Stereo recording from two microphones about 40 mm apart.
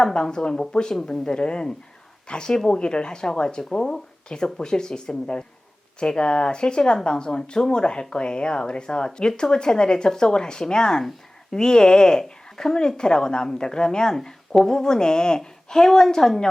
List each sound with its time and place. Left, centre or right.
0.0 s speech: centre